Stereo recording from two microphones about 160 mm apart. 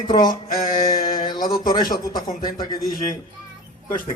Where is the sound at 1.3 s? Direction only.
25° left (ahead or behind).